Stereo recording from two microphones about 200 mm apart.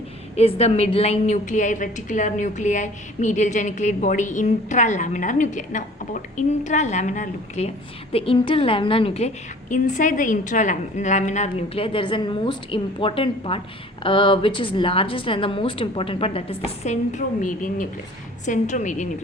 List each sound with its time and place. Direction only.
0.3 s a woman's voice: 30° left (ahead or behind)